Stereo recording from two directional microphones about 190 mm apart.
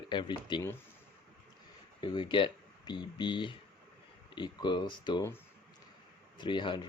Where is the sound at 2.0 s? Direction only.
25° left (ahead or behind).